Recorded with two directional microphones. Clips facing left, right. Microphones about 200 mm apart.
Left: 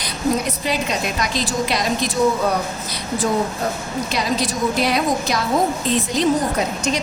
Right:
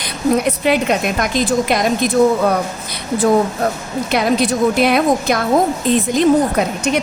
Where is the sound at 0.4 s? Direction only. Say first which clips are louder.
Right 7 dB; 60° right (ahead or behind).